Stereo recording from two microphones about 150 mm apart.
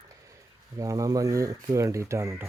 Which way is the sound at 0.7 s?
25° right (ahead or behind).